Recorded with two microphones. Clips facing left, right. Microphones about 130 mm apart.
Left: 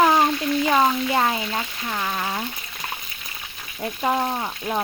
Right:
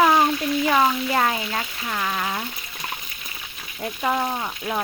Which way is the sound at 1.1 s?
20° left (ahead or behind).